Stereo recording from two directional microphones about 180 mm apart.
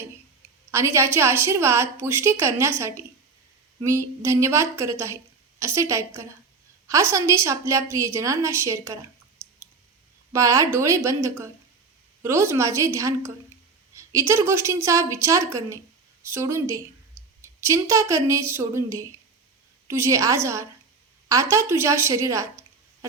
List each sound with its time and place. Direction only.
0.6 s a woman's voice: 15° right (ahead or behind)
10.3 s a woman's voice: 15° right (ahead or behind)